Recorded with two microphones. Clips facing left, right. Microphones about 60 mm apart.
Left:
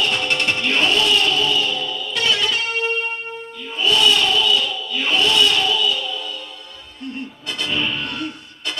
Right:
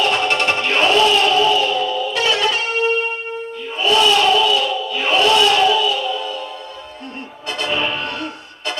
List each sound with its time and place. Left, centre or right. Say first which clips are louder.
0.0 s music: right 4 dB; centre
3.9 s a sound: right 5 dB; centre
5.8 s music: right 4 dB; centre
7.6 s music: right 3 dB; centre
7.9 s music: right 2 dB; right